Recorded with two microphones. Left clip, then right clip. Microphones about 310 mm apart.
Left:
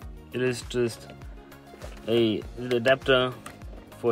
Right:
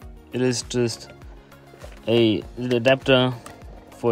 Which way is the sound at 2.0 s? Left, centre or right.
Right.